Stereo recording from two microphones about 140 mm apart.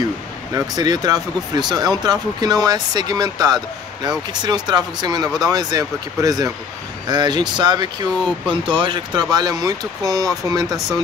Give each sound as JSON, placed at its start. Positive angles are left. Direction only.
{"t": 0.6, "sound": "speech", "side_deg": -30}